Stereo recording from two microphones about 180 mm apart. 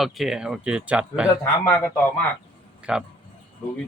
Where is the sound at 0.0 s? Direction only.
Centre (ahead or behind).